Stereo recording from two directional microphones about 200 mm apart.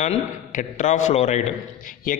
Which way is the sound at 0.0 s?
40° left (ahead or behind).